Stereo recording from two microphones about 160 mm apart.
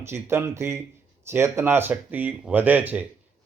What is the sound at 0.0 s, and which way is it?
Speech, 15° right (ahead or behind).